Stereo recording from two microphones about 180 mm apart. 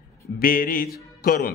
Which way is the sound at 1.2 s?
55° left (ahead or behind).